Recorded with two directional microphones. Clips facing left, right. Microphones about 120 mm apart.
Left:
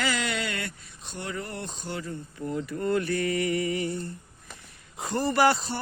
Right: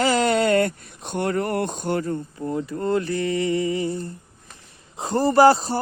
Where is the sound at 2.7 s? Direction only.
30° right (ahead or behind).